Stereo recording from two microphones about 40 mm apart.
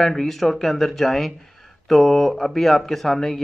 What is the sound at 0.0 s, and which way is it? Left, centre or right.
Speech, centre.